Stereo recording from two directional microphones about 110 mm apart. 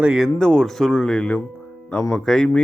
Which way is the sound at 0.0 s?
5° right (ahead or behind).